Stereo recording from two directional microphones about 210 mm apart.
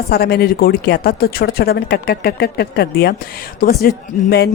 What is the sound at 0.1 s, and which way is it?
Speech, 45° left (ahead or behind).